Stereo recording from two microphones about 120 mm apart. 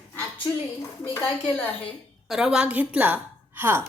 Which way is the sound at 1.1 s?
20° left (ahead or behind).